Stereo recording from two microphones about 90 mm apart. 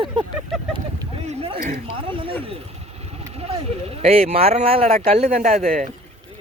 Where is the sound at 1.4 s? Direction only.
90° right.